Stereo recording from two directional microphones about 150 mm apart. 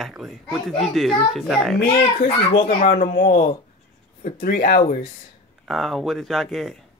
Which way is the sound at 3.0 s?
75° left (ahead or behind).